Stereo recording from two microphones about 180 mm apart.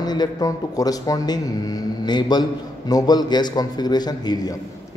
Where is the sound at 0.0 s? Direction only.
20° left (ahead or behind).